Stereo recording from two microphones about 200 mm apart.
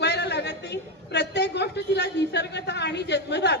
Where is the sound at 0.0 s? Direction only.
60° left (ahead or behind).